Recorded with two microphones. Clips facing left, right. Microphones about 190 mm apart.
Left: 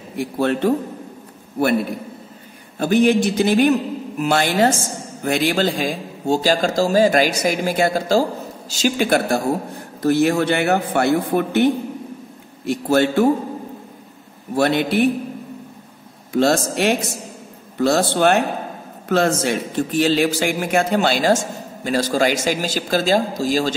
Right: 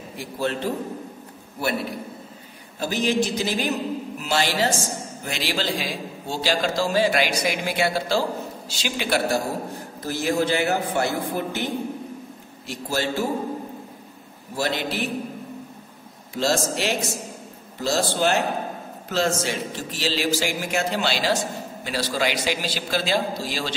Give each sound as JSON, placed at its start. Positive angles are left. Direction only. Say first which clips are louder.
{"t": 0.2, "sound": "a man's voice", "louder": "left 7 dB", "side_deg": 60}
{"t": 2.8, "sound": "a man's voice", "louder": "left 7 dB", "side_deg": 55}
{"t": 10.0, "sound": "a man's voice", "louder": "left 7 dB", "side_deg": 65}
{"t": 14.5, "sound": "a man's voice", "louder": "left 8 dB", "side_deg": 60}
{"t": 16.3, "sound": "a man's voice", "louder": "left 6 dB", "side_deg": 60}